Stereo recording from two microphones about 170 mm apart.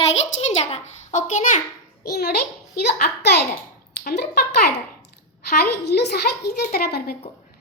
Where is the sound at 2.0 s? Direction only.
65° left (ahead or behind).